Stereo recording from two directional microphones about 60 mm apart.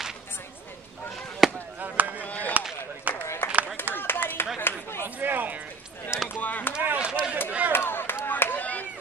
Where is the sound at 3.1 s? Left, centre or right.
Right.